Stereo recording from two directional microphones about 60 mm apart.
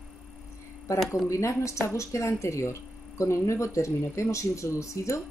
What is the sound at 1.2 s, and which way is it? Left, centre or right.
Speech, left.